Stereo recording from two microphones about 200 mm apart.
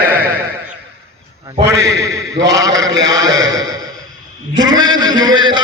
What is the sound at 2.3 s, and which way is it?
Speech, 60° right (ahead or behind).